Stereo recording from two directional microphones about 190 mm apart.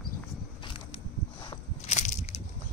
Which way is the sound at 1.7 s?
40° left (ahead or behind).